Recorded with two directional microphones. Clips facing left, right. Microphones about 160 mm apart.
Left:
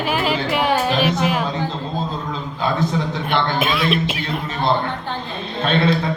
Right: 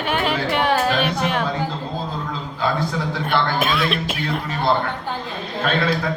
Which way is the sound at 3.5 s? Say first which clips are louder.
Left 2 dB; 5° left (ahead or behind).